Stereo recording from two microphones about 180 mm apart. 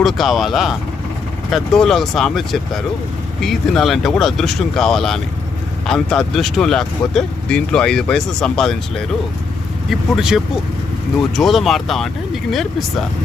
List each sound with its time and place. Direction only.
0.0 s speech: centre (ahead or behind)